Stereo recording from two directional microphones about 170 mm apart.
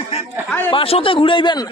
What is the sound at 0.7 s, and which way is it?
Speech, 35° left (ahead or behind).